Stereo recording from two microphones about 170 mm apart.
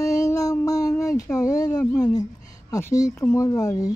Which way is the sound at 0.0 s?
20° left (ahead or behind).